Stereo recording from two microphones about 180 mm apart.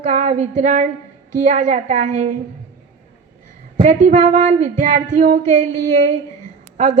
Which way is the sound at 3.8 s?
45° right (ahead or behind).